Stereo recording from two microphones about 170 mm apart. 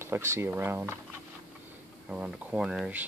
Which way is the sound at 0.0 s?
15° right (ahead or behind).